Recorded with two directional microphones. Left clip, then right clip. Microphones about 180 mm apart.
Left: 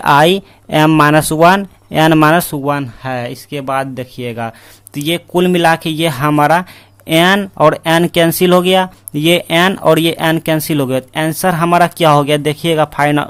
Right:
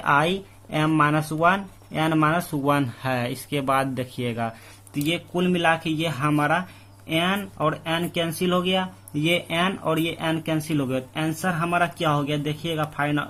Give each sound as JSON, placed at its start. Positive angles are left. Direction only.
{"t": 0.0, "sound": "speech", "side_deg": 45}
{"t": 2.6, "sound": "speech", "side_deg": 30}
{"t": 4.9, "sound": "speech", "side_deg": 45}